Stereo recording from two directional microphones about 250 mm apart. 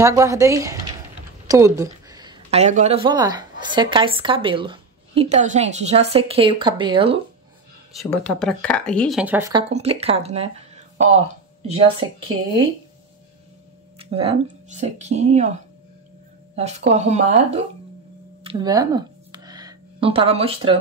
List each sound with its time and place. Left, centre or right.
0.0 s a woman's voice: centre
7.9 s speech: centre
9.5 s speech: right
11.7 s speech: right
13.9 s a woman's voice: right
18.4 s a sound: centre